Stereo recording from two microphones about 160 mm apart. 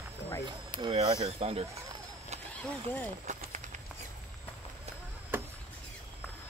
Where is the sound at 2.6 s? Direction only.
10° left (ahead or behind).